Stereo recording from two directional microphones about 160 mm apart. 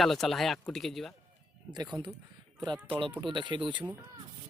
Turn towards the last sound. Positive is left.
turn(degrees=-30)  # may be behind; listen again after turning